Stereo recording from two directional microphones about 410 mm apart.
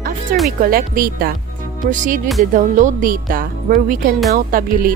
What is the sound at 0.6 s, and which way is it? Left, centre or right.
Speech, right.